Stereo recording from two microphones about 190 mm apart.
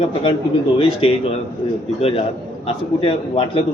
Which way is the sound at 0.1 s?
30° left (ahead or behind).